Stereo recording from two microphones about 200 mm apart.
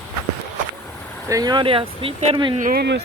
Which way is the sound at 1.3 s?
20° right (ahead or behind).